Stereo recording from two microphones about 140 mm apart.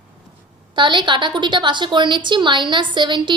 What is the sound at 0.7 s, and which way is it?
A woman's voice, 35° right (ahead or behind).